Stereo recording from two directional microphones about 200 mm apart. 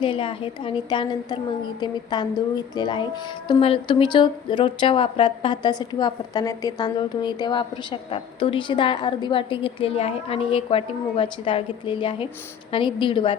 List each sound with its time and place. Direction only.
0.0 s speech: 25° left (ahead or behind)